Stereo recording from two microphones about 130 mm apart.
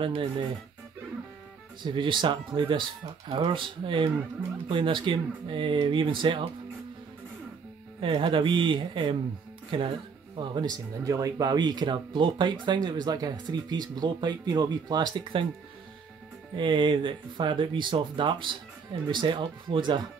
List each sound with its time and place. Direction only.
0.0 s speech: 45° right (ahead or behind)
1.8 s speech: 40° right (ahead or behind)
8.0 s speech: 40° right (ahead or behind)
16.5 s speech: 35° right (ahead or behind)